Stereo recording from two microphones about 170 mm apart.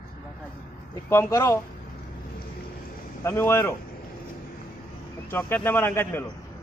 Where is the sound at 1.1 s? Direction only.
15° left (ahead or behind).